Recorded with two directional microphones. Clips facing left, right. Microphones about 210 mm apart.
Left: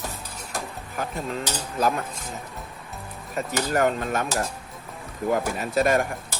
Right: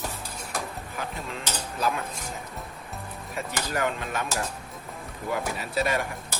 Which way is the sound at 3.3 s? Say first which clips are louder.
Left 6 dB; 45° left (ahead or behind).